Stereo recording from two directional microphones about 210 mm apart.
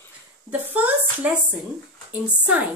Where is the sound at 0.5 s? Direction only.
5° right (ahead or behind).